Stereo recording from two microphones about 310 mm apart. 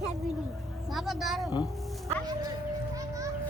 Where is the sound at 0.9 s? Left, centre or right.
Centre.